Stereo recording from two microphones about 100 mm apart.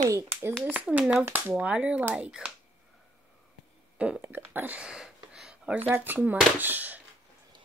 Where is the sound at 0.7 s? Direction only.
15° right (ahead or behind).